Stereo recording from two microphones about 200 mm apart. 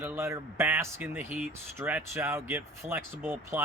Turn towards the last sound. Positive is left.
turn(degrees=-10)  # may be behind; listen again after turning